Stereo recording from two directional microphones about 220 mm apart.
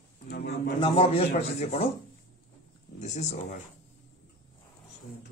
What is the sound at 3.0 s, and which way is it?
Speech, 30° left (ahead or behind).